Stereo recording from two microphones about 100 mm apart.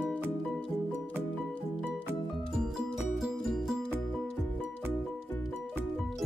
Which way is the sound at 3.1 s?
Centre (ahead or behind).